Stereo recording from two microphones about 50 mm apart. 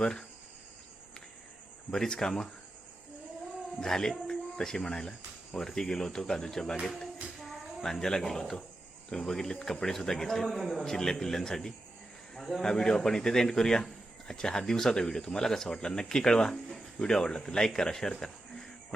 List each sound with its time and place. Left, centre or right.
0.0 s speech: centre
1.9 s a man's voice: centre
3.8 s a man's voice: centre
17.7 s a sound: centre